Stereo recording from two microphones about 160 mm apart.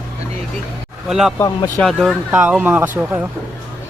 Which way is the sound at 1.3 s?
25° left (ahead or behind).